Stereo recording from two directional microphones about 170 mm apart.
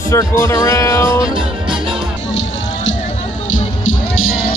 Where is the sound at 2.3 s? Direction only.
90° left.